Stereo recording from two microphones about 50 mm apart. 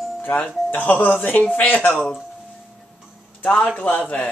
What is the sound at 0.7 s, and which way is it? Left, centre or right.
Speech, left.